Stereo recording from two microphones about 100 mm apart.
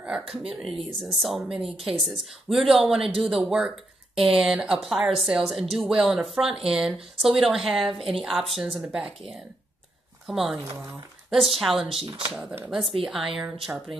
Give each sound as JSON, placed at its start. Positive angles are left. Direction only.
{"t": 0.0, "sound": "speech", "side_deg": -5}
{"t": 11.9, "sound": "speech", "side_deg": -70}
{"t": 13.0, "sound": "speech", "side_deg": -5}